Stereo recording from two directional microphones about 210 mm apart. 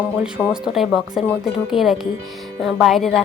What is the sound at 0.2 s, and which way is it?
A woman's voice, 5° right (ahead or behind).